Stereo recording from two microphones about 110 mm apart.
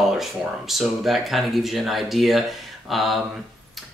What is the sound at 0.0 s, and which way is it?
Speech, 5° right (ahead or behind).